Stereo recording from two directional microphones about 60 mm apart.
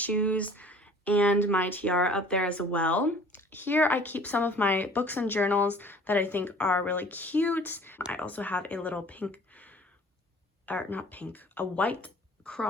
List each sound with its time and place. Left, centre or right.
0.0 s speech: left